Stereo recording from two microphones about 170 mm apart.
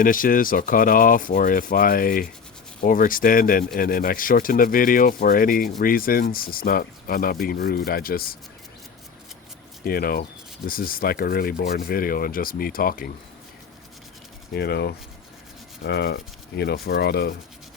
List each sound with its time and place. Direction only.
0.0 s speech: 55° left (ahead or behind)
9.8 s speech: 60° left (ahead or behind)
14.5 s speech: 65° left (ahead or behind)